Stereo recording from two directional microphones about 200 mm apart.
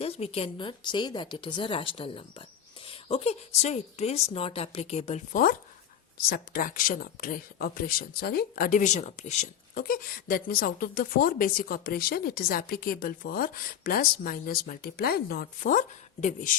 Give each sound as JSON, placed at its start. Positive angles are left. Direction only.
{"t": 0.0, "sound": "speech", "side_deg": 30}